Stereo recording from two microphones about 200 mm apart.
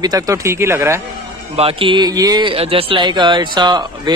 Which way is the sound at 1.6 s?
25° right (ahead or behind).